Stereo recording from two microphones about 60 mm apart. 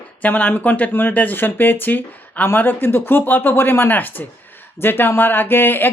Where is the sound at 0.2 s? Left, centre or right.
Left.